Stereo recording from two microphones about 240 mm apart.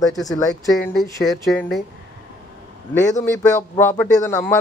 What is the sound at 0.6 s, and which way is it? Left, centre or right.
Speech, centre.